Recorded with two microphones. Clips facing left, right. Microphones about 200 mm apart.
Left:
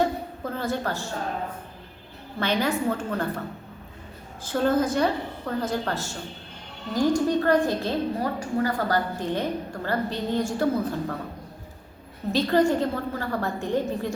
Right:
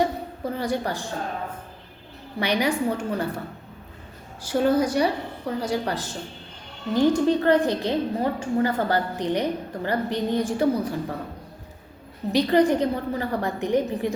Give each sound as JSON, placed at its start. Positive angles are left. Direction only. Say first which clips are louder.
{"t": 0.0, "sound": "a sound", "louder": "right 1 dB", "side_deg": -15}
{"t": 2.4, "sound": "a woman's voice", "louder": "right 1 dB", "side_deg": -15}
{"t": 4.4, "sound": "a woman's voice", "louder": "right 2 dB", "side_deg": -10}
{"t": 12.3, "sound": "a woman's voice", "louder": "right 2 dB", "side_deg": -15}